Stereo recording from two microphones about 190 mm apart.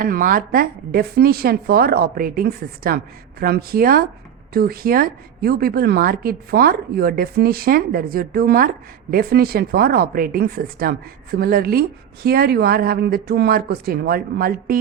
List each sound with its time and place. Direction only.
0.0 s a woman's voice: 45° right (ahead or behind)